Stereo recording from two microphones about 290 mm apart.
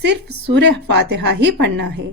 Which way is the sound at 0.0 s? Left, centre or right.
Right.